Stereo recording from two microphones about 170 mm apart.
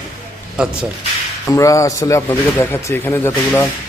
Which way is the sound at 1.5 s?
20° left (ahead or behind).